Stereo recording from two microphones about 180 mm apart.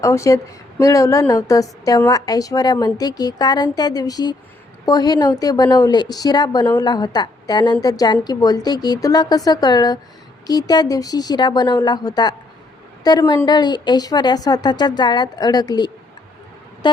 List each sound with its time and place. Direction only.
0.0 s a woman's voice: 15° left (ahead or behind)